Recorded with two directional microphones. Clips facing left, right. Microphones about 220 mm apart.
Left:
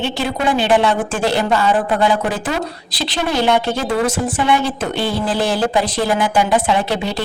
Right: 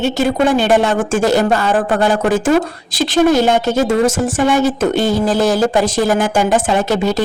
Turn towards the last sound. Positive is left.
turn(degrees=-45)  # may be behind; listen again after turning